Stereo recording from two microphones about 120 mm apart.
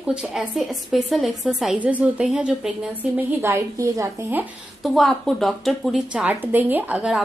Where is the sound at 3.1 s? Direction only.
20° right (ahead or behind).